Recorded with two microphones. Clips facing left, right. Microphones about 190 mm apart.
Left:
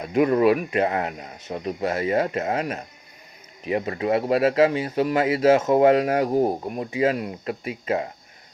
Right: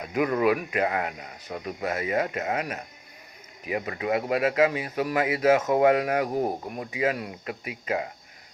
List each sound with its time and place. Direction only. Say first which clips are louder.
0.1 s speech: left 5 dB; 30° left (ahead or behind)